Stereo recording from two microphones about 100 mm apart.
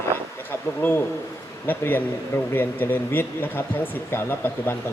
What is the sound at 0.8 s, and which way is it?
Speech, 20° left (ahead or behind).